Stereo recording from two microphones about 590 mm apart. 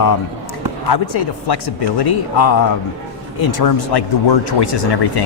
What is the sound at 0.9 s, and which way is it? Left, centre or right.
Speech, left.